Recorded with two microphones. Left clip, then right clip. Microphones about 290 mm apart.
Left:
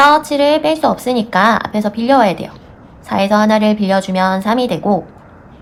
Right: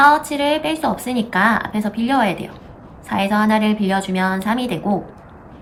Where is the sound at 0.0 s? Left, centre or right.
Centre.